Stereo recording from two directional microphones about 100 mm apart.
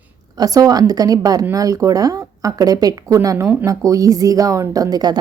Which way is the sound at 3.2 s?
25° right (ahead or behind).